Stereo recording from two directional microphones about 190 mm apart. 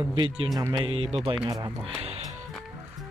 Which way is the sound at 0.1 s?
25° right (ahead or behind).